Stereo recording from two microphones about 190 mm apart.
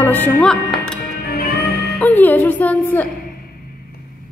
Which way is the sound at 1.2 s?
55° left (ahead or behind).